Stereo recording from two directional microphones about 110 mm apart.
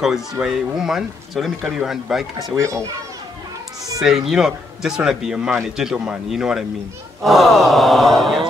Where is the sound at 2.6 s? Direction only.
25° right (ahead or behind).